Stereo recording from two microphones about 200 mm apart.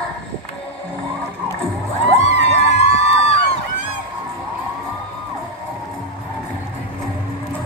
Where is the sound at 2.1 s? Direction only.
35° left (ahead or behind).